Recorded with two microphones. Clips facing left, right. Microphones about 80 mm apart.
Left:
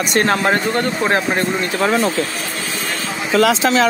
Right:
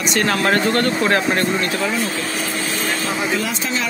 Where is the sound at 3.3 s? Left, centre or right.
Left.